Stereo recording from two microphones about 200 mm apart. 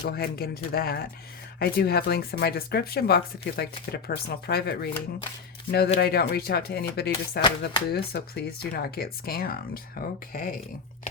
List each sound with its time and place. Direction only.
0.0 s speech: 50° left (ahead or behind)